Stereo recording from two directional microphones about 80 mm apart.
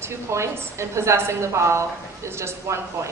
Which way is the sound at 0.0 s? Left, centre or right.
Right.